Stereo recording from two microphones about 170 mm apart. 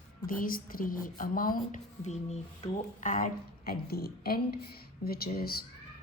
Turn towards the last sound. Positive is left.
turn(degrees=65)  # may be behind; listen again after turning